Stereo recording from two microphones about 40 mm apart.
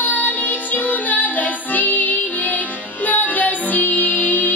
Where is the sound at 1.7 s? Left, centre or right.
Left.